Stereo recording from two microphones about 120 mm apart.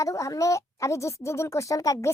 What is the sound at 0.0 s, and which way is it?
Speech, 25° left (ahead or behind).